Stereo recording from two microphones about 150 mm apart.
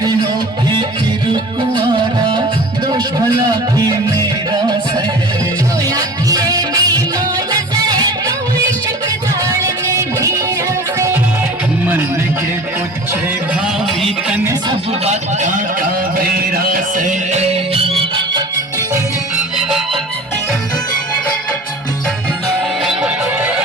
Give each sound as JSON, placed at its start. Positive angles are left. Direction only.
{"t": 2.8, "sound": "music", "side_deg": -25}
{"t": 5.9, "sound": "music", "side_deg": -25}
{"t": 9.4, "sound": "music", "side_deg": -20}
{"t": 14.0, "sound": "music", "side_deg": -5}
{"t": 14.7, "sound": "a sound", "side_deg": -45}
{"t": 22.8, "sound": "music", "side_deg": -5}